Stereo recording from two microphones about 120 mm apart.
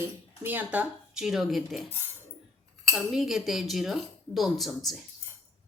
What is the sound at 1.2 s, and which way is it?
Speech, centre (ahead or behind).